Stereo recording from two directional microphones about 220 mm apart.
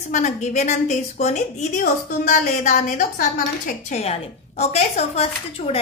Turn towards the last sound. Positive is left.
turn(degrees=30)  # may be behind; listen again after turning